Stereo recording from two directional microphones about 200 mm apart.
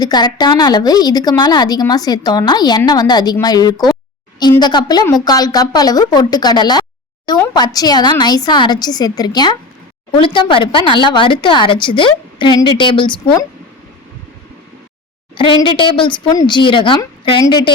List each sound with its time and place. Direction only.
0.0 s a woman's voice: 20° left (ahead or behind)
15.4 s a woman's voice: 25° left (ahead or behind)